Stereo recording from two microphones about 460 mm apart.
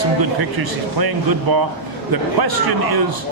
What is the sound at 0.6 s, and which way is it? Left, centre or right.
Speech, right.